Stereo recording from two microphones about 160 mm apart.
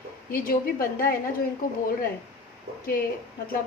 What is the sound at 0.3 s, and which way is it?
A woman's voice, 65° left (ahead or behind).